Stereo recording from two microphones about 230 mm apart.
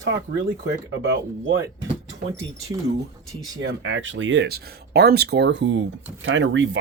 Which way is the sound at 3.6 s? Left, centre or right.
Right.